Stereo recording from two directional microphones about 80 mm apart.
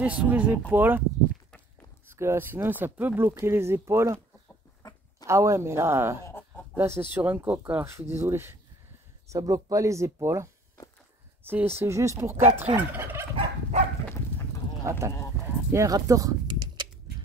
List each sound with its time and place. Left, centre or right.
0.0 s speech: centre
0.7 s fowl: right
2.0 s speech: right
4.8 s a sound: left
5.2 s speech: right
6.3 s a sound: centre
6.8 s fowl: right
7.8 s speech: right
9.3 s speech: right
11.4 s fowl: right
14.9 s speech: right
16.4 s a sound: right